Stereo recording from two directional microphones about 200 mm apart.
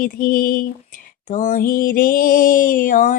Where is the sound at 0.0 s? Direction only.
45° left (ahead or behind).